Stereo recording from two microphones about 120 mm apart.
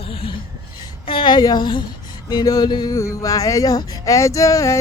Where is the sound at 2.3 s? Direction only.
35° left (ahead or behind).